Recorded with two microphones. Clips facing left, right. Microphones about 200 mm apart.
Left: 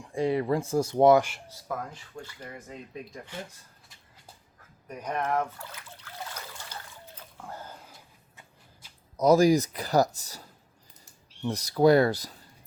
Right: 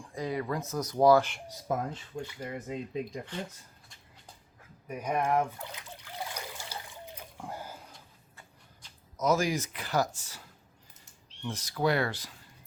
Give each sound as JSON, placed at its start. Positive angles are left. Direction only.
{"t": 0.0, "sound": "speech", "side_deg": 25}
{"t": 1.5, "sound": "speech", "side_deg": -20}
{"t": 4.9, "sound": "trickle", "side_deg": -10}
{"t": 7.8, "sound": "a sound", "side_deg": 0}
{"t": 9.1, "sound": "speech", "side_deg": 35}
{"t": 11.4, "sound": "speech", "side_deg": 40}